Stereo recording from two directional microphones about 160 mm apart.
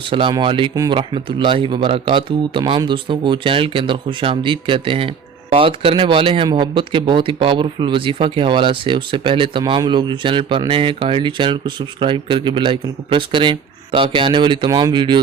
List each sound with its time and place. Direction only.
0.0 s speech: 30° right (ahead or behind)